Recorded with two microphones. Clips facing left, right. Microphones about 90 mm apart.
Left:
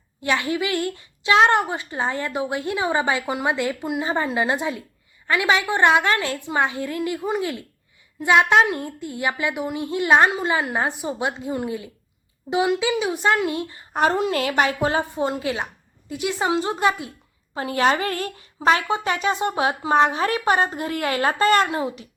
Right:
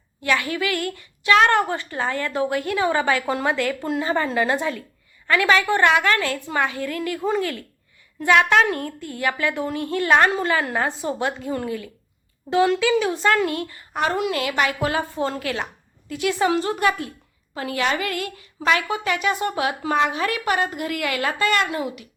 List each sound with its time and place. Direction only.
0.2 s a woman's voice: 25° left (ahead or behind)
13.9 s a woman's voice: 35° left (ahead or behind)